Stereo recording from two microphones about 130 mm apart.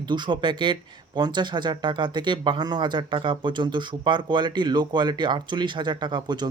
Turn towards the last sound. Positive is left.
turn(degrees=-35)  # may be behind; listen again after turning